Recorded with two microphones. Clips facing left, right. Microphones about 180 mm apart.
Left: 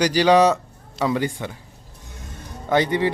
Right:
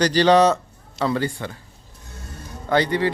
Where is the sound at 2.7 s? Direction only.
20° left (ahead or behind).